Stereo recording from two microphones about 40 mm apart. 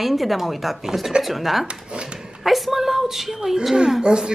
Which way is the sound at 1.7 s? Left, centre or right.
Right.